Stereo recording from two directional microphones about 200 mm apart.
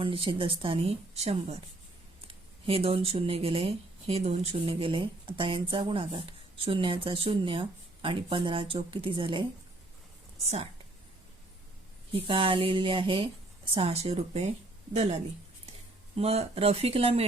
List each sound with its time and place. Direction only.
0.0 s speech: 25° right (ahead or behind)
12.1 s speech: 25° right (ahead or behind)